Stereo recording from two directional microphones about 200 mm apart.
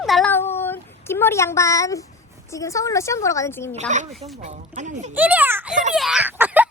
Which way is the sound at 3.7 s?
35° right (ahead or behind).